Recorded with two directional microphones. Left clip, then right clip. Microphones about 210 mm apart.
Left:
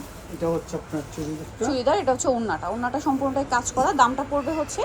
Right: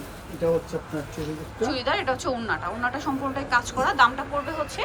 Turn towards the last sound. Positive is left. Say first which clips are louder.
# left 3 dB
turn(degrees=30)  # may be behind; listen again after turning